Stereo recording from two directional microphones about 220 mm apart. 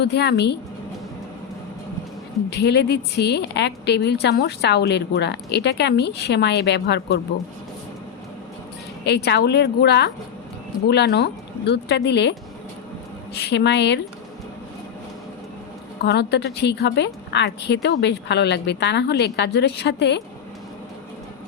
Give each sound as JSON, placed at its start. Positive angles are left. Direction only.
{"t": 0.0, "sound": "a woman's voice", "side_deg": 50}
{"t": 2.5, "sound": "a woman's voice", "side_deg": 50}
{"t": 9.0, "sound": "a woman's voice", "side_deg": 50}
{"t": 13.5, "sound": "a woman's voice", "side_deg": 50}
{"t": 16.0, "sound": "a woman's voice", "side_deg": 50}